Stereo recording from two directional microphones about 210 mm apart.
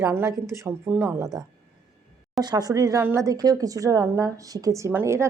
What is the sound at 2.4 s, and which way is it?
A woman's voice, 20° right (ahead or behind).